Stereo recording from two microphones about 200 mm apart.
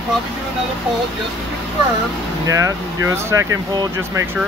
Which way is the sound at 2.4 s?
15° right (ahead or behind).